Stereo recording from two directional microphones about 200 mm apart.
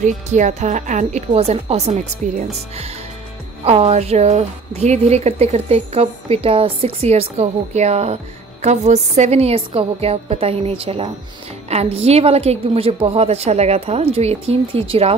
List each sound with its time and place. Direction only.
0.0 s a woman's voice: 35° right (ahead or behind)
3.6 s a woman's voice: 30° right (ahead or behind)